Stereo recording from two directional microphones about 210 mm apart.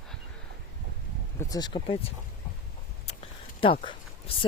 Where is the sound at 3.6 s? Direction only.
25° left (ahead or behind).